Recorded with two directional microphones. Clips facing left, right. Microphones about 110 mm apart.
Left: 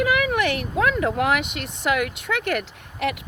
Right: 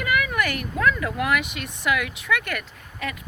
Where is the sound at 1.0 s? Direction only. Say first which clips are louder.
Left 3 dB; 60° left (ahead or behind).